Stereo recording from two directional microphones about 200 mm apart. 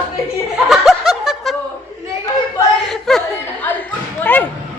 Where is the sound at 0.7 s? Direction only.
Centre (ahead or behind).